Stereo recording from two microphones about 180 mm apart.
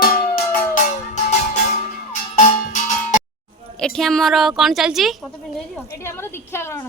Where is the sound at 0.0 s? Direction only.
55° left (ahead or behind).